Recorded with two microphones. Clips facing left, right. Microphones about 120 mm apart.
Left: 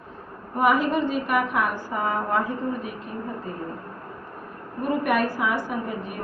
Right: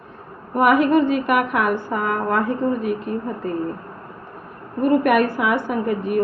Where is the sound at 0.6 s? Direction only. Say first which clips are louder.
Right 6 dB; 65° right (ahead or behind).